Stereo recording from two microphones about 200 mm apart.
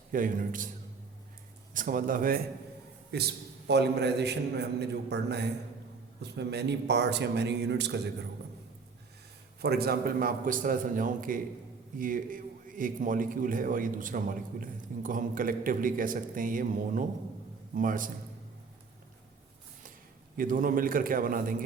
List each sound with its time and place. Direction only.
0.1 s a man's voice: 45° right (ahead or behind)
1.7 s a man's voice: 40° right (ahead or behind); by 8.1 s 60° right (ahead or behind)
9.6 s a man's voice: 55° right (ahead or behind)
20.3 s a man's voice: 45° right (ahead or behind)